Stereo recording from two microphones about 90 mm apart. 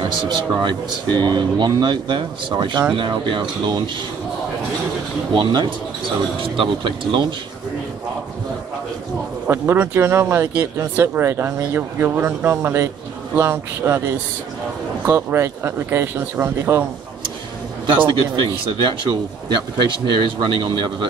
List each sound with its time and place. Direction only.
0.3 s speech: 55° right (ahead or behind)
5.3 s speech: 60° right (ahead or behind)
6.4 s speech: 75° right (ahead or behind)
9.5 s speech: 25° right (ahead or behind)
17.8 s speech: 65° right (ahead or behind)
20.2 s speech: 65° right (ahead or behind)